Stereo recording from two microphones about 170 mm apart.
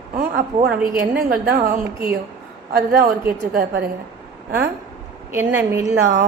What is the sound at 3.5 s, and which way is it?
Speech, 60° right (ahead or behind).